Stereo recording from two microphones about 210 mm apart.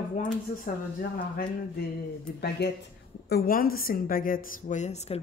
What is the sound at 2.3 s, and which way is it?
Speech, 50° left (ahead or behind).